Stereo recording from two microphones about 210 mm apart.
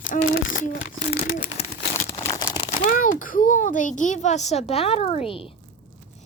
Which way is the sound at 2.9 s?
40° left (ahead or behind).